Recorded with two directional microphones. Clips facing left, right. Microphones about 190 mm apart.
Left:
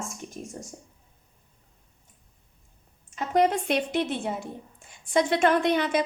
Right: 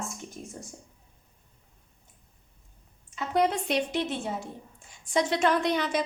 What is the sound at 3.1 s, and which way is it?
A woman's voice, 45° left (ahead or behind).